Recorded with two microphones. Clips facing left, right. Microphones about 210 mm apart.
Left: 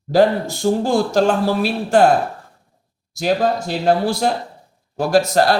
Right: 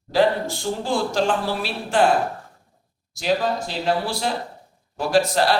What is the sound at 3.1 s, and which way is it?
Speech, 45° left (ahead or behind).